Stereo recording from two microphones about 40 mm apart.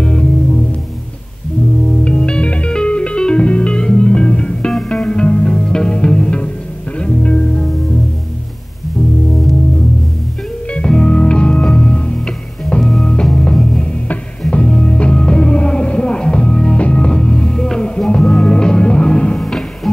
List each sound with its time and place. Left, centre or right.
0.0 s music: left
2.0 s music: left
10.7 s music: centre
12.8 s music: centre; by 17.1 s left
17.1 s music: centre
19.4 s music: centre